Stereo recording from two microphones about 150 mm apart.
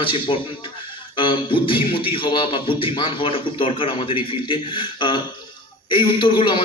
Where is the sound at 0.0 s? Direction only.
35° left (ahead or behind).